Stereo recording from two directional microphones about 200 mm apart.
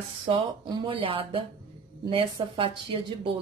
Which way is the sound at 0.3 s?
25° right (ahead or behind).